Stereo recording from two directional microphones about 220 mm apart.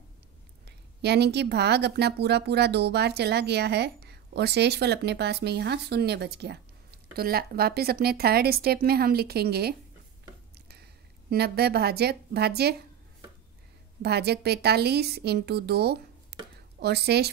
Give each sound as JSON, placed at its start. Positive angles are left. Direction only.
{"t": 0.7, "sound": "a woman's voice", "side_deg": -50}
{"t": 14.0, "sound": "a woman's voice", "side_deg": -50}